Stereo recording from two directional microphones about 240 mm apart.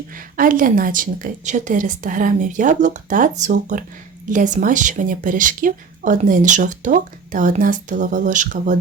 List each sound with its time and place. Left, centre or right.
0.1 s speech: right